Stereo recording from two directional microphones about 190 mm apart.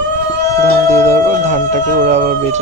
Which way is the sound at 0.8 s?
35° right (ahead or behind).